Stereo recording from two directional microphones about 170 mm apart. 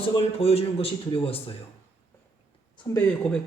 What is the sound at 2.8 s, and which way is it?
Speech, 20° left (ahead or behind).